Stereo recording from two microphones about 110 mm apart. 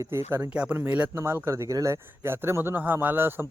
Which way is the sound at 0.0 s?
25° right (ahead or behind).